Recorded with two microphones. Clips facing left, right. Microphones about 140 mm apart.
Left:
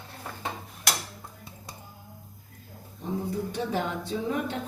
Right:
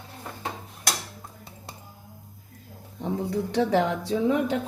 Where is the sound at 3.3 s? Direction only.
85° right.